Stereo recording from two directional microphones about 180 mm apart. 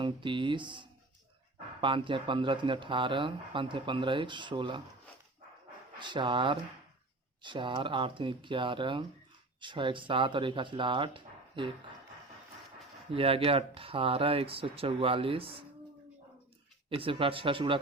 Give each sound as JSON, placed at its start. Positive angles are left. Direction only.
{"t": 0.0, "sound": "speech", "side_deg": -25}
{"t": 6.0, "sound": "speech", "side_deg": -25}
{"t": 13.1, "sound": "speech", "side_deg": -30}
{"t": 16.9, "sound": "speech", "side_deg": -30}